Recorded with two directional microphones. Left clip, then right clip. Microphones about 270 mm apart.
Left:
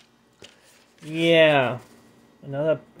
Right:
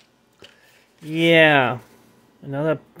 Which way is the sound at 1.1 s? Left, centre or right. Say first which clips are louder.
Right 3 dB; centre.